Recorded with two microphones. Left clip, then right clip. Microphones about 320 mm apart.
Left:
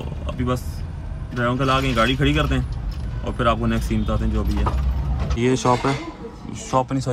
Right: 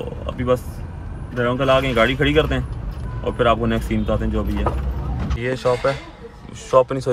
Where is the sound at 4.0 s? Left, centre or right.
Right.